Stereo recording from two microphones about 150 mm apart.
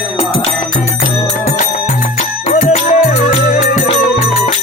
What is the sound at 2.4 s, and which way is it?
Music, 60° left (ahead or behind).